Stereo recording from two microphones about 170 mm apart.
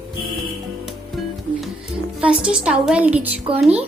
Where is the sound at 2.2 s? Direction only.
5° right (ahead or behind).